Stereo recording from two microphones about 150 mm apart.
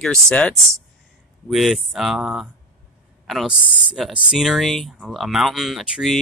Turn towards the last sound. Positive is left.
turn(degrees=0)  # may be behind; listen again after turning